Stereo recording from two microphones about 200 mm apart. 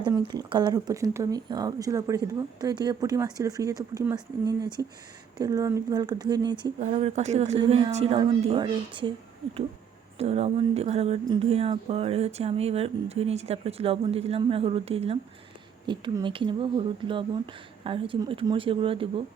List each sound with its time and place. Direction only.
0.0 s speech: 20° right (ahead or behind)
6.7 s speech: 35° right (ahead or behind)
10.2 s speech: 30° right (ahead or behind)